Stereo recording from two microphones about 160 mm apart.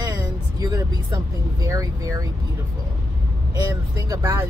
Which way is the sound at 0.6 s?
25° right (ahead or behind).